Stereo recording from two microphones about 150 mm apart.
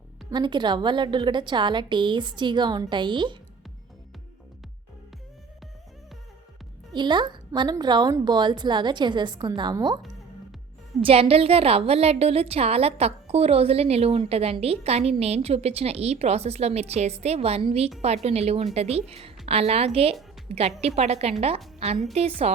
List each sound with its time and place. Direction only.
0.3 s a woman's voice: 30° right (ahead or behind)
6.9 s a woman's voice: 30° right (ahead or behind)
11.0 s a woman's voice: 40° right (ahead or behind)